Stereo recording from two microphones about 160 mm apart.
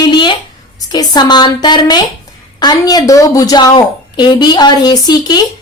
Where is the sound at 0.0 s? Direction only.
30° left (ahead or behind).